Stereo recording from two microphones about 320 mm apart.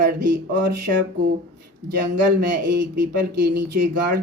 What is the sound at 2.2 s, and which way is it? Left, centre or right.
A man's voice, right.